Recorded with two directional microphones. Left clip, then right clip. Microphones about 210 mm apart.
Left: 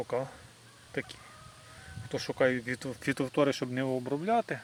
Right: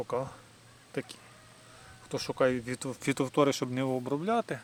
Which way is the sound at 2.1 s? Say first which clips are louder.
Even; 10° right (ahead or behind).